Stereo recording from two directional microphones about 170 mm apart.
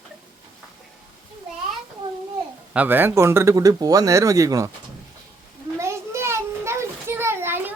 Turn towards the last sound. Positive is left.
turn(degrees=-10)  # may be behind; listen again after turning